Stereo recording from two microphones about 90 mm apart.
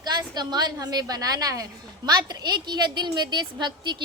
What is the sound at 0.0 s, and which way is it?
A woman's voice, 50° right (ahead or behind).